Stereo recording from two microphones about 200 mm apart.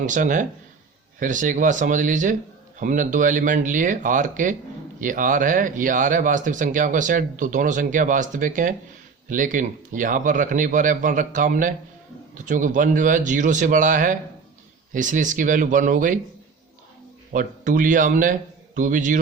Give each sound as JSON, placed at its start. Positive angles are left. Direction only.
{"t": 0.0, "sound": "speech", "side_deg": -40}
{"t": 17.3, "sound": "a man's voice", "side_deg": -40}